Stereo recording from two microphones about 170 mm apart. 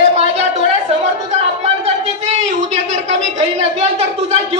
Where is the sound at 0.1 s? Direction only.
40° right (ahead or behind).